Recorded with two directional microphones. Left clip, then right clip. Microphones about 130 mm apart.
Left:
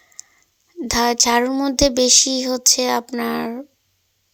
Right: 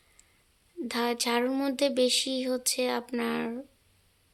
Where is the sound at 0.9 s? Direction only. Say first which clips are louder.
Left 12 dB; 45° left (ahead or behind).